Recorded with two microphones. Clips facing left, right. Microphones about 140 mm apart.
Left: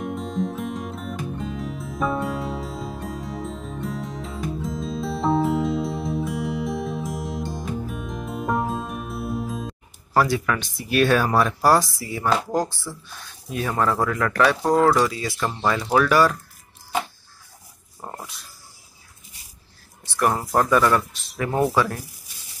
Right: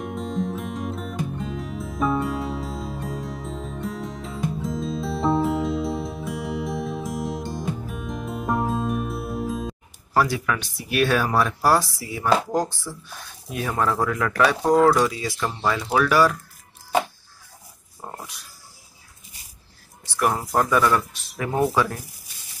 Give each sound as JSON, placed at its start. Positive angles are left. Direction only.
{"t": 0.0, "sound": "music", "side_deg": 0}
{"t": 13.7, "sound": "speech", "side_deg": -10}
{"t": 15.4, "sound": "speech", "side_deg": 0}
{"t": 20.5, "sound": "speech", "side_deg": -5}